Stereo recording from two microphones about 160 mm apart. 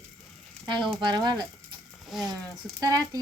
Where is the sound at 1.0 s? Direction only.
25° right (ahead or behind).